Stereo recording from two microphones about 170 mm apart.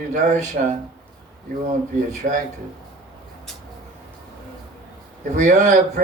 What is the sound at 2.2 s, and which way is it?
Speech, 50° right (ahead or behind).